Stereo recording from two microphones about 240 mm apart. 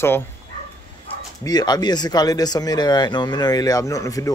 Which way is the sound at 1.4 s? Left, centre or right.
Centre.